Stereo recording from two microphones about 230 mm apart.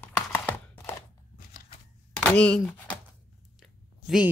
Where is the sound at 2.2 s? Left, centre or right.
Centre.